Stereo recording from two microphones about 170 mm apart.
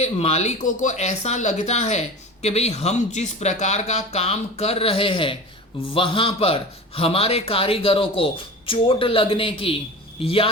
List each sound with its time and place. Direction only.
0.0 s speech: 40° left (ahead or behind)